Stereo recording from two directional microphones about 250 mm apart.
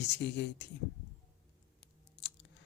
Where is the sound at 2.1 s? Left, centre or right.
Left.